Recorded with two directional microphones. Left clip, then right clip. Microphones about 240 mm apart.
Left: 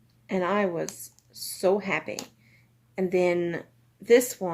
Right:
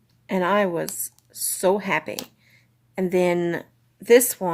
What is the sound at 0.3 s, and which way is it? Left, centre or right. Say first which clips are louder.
Speech: right 5 dB; right.